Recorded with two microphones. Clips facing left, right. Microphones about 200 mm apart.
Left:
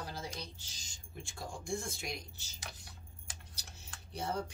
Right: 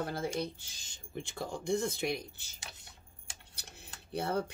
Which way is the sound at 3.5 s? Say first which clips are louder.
Right 3 dB; 60° right (ahead or behind).